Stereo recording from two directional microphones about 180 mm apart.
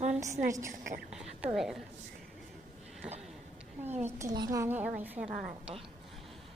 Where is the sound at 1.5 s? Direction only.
Centre (ahead or behind).